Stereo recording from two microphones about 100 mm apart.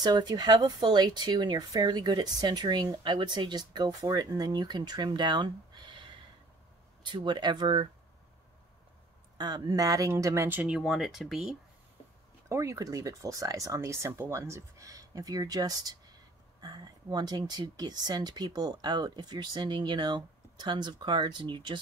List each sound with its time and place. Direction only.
0.0 s speech: 45° right (ahead or behind)
9.4 s a woman's voice: 45° right (ahead or behind)
10.6 s speech: 5° right (ahead or behind)
12.4 s speech: 30° right (ahead or behind); by 21.7 s 50° right (ahead or behind)